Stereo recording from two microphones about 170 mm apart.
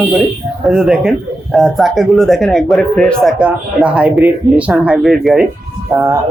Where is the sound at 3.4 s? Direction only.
5° right (ahead or behind).